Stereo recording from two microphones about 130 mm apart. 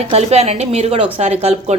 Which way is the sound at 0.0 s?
55° right (ahead or behind).